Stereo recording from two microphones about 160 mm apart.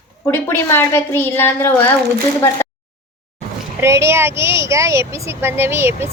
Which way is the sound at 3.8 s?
15° right (ahead or behind).